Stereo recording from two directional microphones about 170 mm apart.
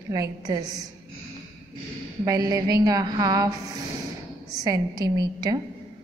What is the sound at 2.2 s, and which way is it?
A woman's voice, 20° right (ahead or behind).